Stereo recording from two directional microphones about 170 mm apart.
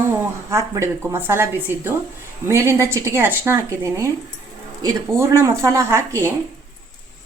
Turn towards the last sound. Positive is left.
turn(degrees=-15)  # may be behind; listen again after turning